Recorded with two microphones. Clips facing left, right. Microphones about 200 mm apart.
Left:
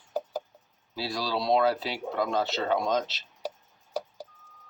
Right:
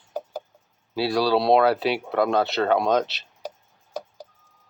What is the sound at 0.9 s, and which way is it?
Speech, 70° right (ahead or behind).